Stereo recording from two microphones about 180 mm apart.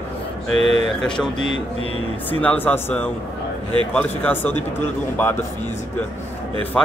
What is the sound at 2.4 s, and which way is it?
Speech, 10° left (ahead or behind).